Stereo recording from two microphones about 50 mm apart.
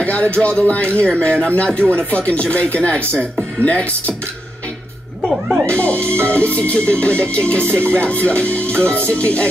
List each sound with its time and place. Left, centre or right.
0.0 s a man's voice: left
5.7 s a man's voice: left